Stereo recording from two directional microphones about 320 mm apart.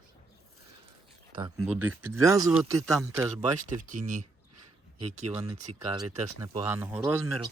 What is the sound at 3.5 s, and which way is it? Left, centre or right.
Speech, right.